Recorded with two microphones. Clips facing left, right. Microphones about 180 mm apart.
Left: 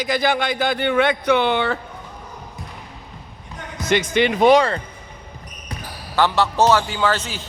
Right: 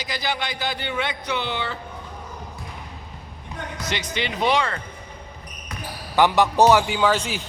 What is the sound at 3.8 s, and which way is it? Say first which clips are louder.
Speech: left 11 dB; 50° left (ahead or behind).